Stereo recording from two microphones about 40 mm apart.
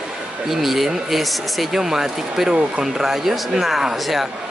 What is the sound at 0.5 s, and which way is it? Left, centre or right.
Speech, centre.